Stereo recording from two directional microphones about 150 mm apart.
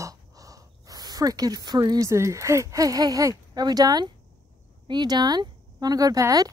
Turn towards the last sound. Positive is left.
turn(degrees=-25)  # may be behind; listen again after turning